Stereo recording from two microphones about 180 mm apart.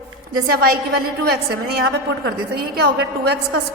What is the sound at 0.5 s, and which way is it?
A woman's voice, 60° right (ahead or behind).